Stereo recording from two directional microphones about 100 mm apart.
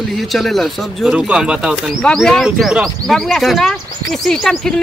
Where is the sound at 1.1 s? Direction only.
10° right (ahead or behind).